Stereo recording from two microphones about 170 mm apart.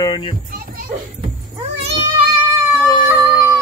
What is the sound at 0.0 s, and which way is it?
Children playing, 25° left (ahead or behind).